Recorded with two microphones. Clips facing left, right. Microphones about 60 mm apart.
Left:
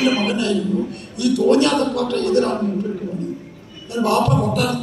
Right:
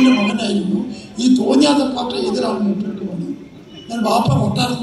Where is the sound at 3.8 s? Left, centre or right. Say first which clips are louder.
Right 1 dB; left.